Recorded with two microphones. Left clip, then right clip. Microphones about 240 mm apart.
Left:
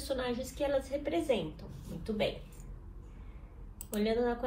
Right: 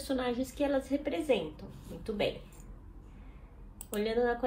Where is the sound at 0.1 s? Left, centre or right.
Right.